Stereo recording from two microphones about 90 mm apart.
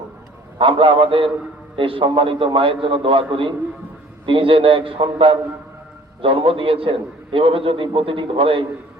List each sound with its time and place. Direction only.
0.6 s a man's voice: 80° right
6.2 s a man's voice: 90° right